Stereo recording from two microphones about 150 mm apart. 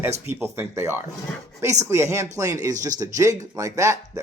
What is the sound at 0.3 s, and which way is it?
Speech, 15° right (ahead or behind).